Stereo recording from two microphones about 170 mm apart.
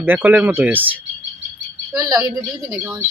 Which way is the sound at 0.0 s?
10° right (ahead or behind).